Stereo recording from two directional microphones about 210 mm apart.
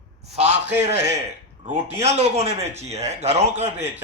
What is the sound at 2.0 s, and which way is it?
A man's voice, 30° right (ahead or behind).